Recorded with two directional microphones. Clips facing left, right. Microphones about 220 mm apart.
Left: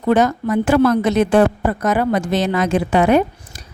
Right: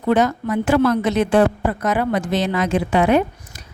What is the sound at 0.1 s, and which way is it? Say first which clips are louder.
Speech: left 2 dB; 45° left (ahead or behind).